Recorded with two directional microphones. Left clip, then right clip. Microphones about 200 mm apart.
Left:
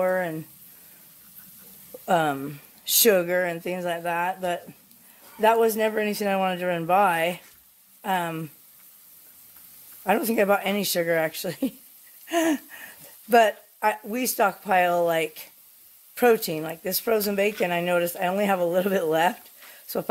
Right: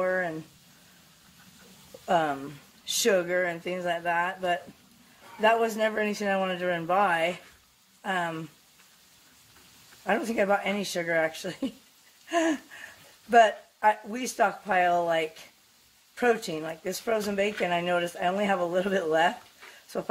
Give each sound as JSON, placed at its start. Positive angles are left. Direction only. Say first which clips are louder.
{"t": 0.0, "sound": "a sound", "louder": "left 3 dB", "side_deg": 55}
{"t": 2.0, "sound": "speech", "louder": "left 3 dB", "side_deg": 50}
{"t": 10.0, "sound": "speech", "louder": "left 4 dB", "side_deg": 50}